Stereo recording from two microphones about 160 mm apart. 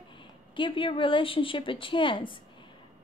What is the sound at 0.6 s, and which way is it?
Speech, 30° left (ahead or behind).